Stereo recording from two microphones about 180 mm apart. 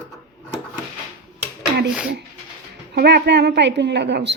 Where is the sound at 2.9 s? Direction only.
65° right (ahead or behind).